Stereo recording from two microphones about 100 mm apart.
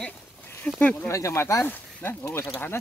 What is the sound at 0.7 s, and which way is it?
Speech, 15° left (ahead or behind).